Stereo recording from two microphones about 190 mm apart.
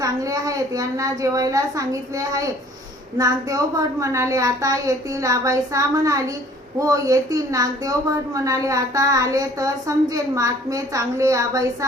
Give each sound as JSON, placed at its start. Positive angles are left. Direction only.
{"t": 0.0, "sound": "a woman's voice", "side_deg": -20}